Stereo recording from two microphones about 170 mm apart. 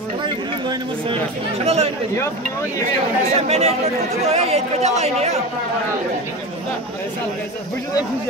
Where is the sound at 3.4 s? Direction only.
40° right (ahead or behind).